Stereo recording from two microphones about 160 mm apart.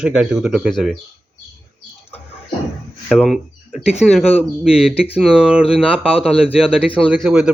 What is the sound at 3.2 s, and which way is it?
Speech, 5° right (ahead or behind).